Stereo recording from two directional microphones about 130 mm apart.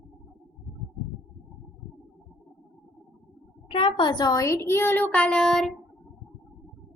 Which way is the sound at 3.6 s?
50° left (ahead or behind).